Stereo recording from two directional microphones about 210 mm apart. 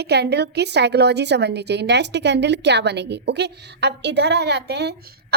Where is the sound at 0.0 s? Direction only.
50° right (ahead or behind).